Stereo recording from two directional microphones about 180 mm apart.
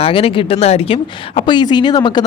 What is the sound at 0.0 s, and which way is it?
Speech, 30° left (ahead or behind).